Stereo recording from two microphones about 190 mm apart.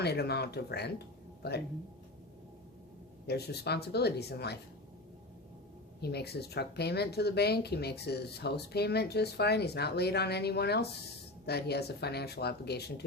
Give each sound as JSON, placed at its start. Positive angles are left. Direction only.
{"t": 0.0, "sound": "speech", "side_deg": 60}
{"t": 3.2, "sound": "speech", "side_deg": 60}
{"t": 6.0, "sound": "speech", "side_deg": 60}